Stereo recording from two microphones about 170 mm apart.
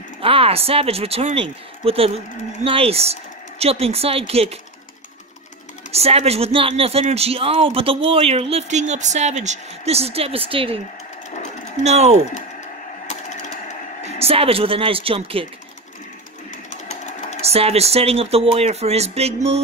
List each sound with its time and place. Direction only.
0.2 s speech: 35° right (ahead or behind)
5.9 s speech: 35° right (ahead or behind)
11.8 s speech: 40° right (ahead or behind)
13.0 s a sound: 50° left (ahead or behind)
14.0 s speech: 35° right (ahead or behind)
16.8 s sewing machine: 40° left (ahead or behind)
17.4 s speech: 35° right (ahead or behind)